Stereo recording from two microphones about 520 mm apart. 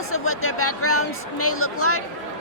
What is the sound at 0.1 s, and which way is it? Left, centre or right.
Speech, left.